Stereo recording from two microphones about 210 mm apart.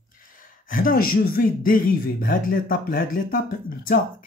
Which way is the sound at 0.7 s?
40° left (ahead or behind).